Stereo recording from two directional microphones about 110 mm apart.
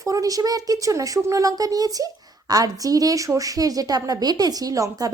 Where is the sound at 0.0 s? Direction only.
30° right (ahead or behind).